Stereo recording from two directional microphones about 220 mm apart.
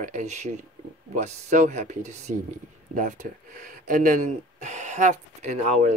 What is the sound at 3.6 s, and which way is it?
Speech, 35° right (ahead or behind).